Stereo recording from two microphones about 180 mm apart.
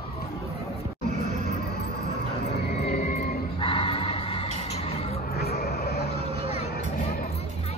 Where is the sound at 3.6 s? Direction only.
30° left (ahead or behind).